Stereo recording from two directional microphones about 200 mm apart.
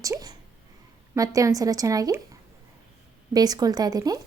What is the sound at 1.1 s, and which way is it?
Speech, 15° right (ahead or behind).